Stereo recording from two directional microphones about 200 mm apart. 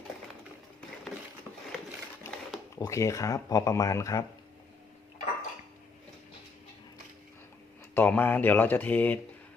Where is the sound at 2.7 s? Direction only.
15° left (ahead or behind).